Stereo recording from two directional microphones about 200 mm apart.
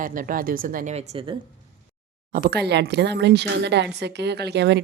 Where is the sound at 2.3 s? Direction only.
50° right (ahead or behind).